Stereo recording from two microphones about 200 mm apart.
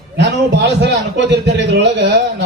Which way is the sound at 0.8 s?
60° right (ahead or behind).